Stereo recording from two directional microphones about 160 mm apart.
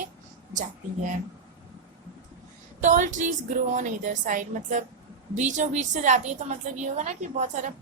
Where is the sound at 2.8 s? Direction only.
50° right (ahead or behind).